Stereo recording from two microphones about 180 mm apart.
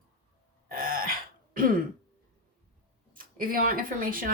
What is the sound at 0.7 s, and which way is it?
Throat clearing, 55° right (ahead or behind).